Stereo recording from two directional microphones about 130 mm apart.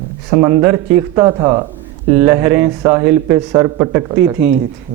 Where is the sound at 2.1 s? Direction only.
10° right (ahead or behind).